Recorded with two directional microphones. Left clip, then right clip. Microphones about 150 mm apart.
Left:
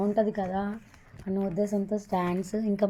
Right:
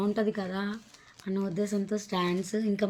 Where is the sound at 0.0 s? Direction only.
30° right (ahead or behind).